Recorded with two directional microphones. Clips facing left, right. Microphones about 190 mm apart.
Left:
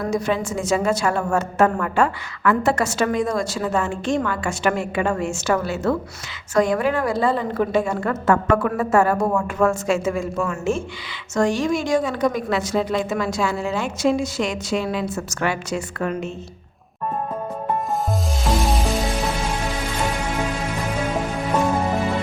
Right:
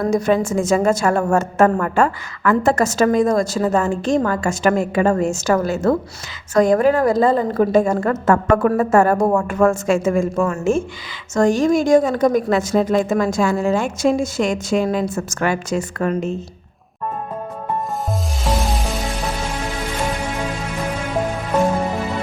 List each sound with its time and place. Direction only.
0.1 s a woman's voice: 45° right (ahead or behind)